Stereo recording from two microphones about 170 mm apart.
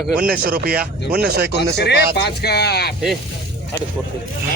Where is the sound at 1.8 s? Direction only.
75° left (ahead or behind).